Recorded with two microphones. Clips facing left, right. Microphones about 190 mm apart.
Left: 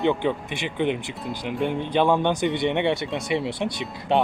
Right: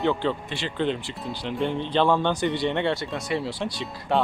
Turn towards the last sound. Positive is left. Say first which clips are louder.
# left 2 dB
turn(degrees=20)  # may be behind; listen again after turning